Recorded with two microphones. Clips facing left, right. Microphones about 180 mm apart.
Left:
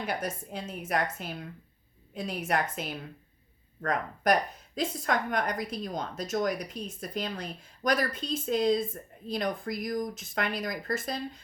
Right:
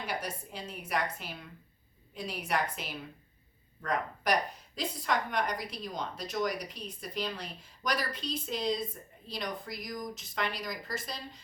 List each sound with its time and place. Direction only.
0.1 s a woman's voice: 50° left (ahead or behind)
2.5 s a woman's voice: 50° left (ahead or behind)